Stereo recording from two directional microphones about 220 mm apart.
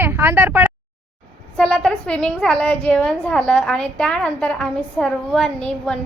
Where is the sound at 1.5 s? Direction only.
5° left (ahead or behind).